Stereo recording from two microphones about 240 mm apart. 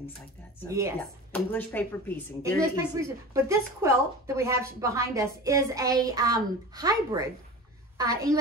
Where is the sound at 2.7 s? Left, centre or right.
Centre.